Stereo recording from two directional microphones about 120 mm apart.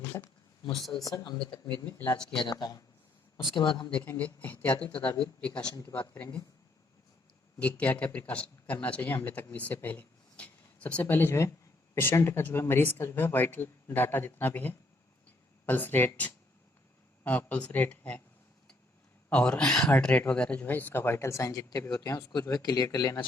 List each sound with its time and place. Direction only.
0.0 s a sound: 20° left (ahead or behind)
0.7 s speech: centre (ahead or behind)
1.0 s speech: 35° left (ahead or behind)
2.1 s speech: 5° left (ahead or behind)
2.4 s speech: 40° left (ahead or behind)
3.9 s speech: 15° left (ahead or behind)
7.6 s speech: 15° left (ahead or behind)
19.3 s speech: 10° left (ahead or behind); by 23.2 s 35° left (ahead or behind)